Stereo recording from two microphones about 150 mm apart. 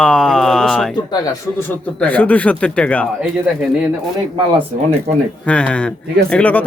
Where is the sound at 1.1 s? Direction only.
25° left (ahead or behind).